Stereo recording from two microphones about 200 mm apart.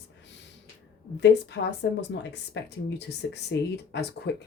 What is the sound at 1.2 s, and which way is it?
Speech, 60° left (ahead or behind).